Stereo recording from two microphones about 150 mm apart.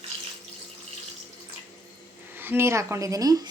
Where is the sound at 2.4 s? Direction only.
15° right (ahead or behind).